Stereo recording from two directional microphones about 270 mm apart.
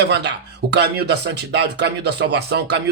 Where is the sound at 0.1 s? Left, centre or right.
Right.